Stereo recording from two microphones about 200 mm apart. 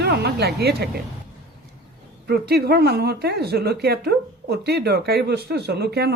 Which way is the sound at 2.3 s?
50° right (ahead or behind).